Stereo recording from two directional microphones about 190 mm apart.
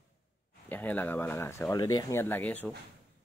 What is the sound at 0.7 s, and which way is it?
Speech, 10° left (ahead or behind).